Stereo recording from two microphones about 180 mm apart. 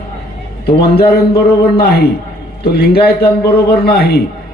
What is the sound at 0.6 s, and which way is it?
A man's voice, 60° left (ahead or behind).